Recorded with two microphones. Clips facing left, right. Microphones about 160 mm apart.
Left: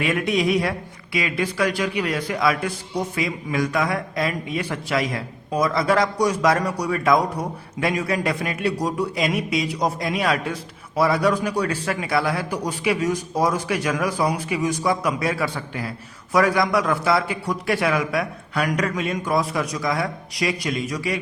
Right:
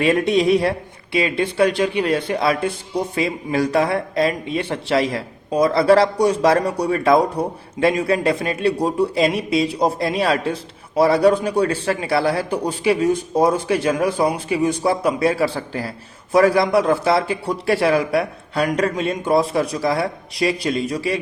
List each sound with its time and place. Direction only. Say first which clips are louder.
0.0 s a man's voice: right 5 dB; 30° right (ahead or behind)